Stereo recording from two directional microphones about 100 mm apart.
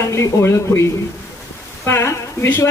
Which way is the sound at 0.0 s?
30° left (ahead or behind).